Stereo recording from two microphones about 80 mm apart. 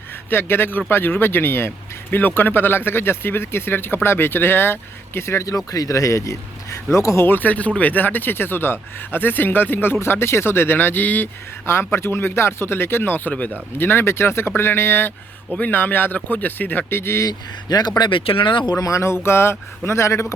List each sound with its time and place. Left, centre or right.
0.3 s speech: left
7.3 s speech: left
17.2 s speech: left
18.8 s speech: left